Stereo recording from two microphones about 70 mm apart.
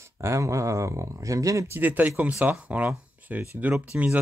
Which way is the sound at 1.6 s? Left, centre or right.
Right.